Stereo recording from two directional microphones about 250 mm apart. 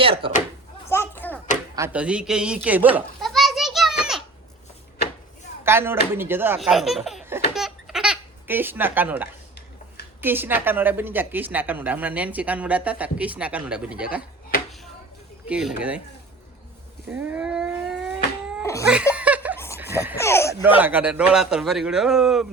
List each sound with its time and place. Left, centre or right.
0.0 s speech: right
0.9 s a sound: centre
1.7 s children playing: centre
5.6 s a woman's voice: centre
15.4 s a man's voice: centre
17.1 s a sound: centre
18.6 s laughter: centre
18.9 s laughter: centre
19.7 s a sound: centre
20.1 s speech: centre
20.6 s a man's voice: centre